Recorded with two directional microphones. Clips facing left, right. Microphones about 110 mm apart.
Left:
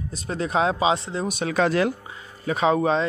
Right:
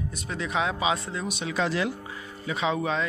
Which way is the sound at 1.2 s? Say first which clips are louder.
Left 8 dB; 45° left (ahead or behind).